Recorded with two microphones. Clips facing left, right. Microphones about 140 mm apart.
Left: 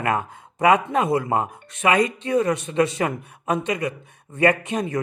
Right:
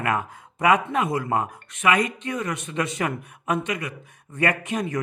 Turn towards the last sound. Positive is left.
turn(degrees=30)  # may be behind; listen again after turning